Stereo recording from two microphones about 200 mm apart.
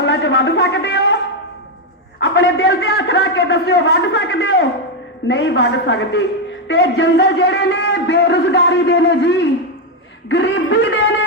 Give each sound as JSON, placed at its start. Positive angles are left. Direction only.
{"t": 0.0, "sound": "a sound", "side_deg": 60}
{"t": 2.1, "sound": "a man's voice", "side_deg": 70}
{"t": 2.9, "sound": "a man's voice", "side_deg": 60}